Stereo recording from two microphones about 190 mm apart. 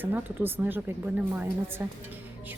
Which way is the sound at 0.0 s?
10° right (ahead or behind).